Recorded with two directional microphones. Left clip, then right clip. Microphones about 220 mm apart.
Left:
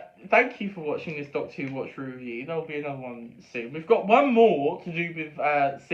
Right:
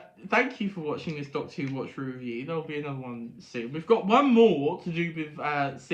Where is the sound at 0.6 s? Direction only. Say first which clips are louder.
Left 2 dB; 55° right (ahead or behind).